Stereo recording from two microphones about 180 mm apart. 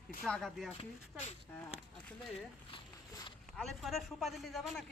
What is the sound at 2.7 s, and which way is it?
Walk, 25° left (ahead or behind).